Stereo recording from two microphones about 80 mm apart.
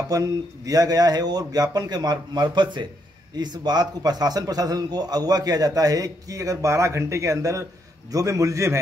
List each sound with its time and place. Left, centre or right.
0.1 s a man's voice: right